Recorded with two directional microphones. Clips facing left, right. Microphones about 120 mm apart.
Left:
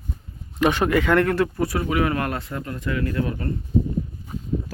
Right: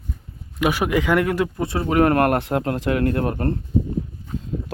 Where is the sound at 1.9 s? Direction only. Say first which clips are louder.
Right 6 dB; 50° right (ahead or behind).